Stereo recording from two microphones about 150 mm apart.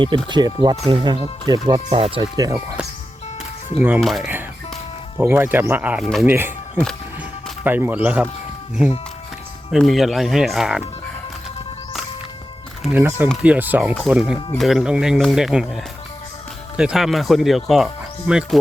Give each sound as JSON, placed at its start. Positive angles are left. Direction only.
{"t": 0.3, "sound": "speech", "side_deg": -30}
{"t": 1.9, "sound": "speech", "side_deg": -40}
{"t": 3.8, "sound": "speech", "side_deg": -10}
{"t": 4.0, "sound": "speech", "side_deg": 0}
{"t": 5.2, "sound": "speech", "side_deg": -15}
{"t": 6.0, "sound": "speech", "side_deg": 0}
{"t": 6.2, "sound": "speech", "side_deg": -15}
{"t": 9.7, "sound": "speech", "side_deg": 0}
{"t": 12.9, "sound": "speech", "side_deg": -15}
{"t": 14.3, "sound": "speech", "side_deg": 35}
{"t": 14.6, "sound": "speech", "side_deg": 0}